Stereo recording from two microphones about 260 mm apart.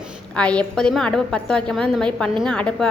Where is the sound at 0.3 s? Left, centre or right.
Centre.